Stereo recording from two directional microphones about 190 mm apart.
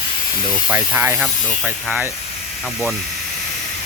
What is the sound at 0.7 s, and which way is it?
Speech, 10° right (ahead or behind).